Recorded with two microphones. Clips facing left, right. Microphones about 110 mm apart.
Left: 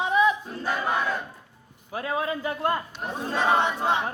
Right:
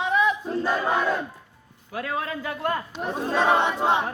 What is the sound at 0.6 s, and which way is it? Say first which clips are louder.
Battle cry: right 2 dB; 25° right (ahead or behind).